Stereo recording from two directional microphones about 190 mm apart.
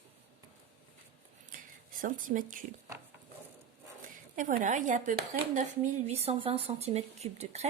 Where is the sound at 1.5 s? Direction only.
45° right (ahead or behind).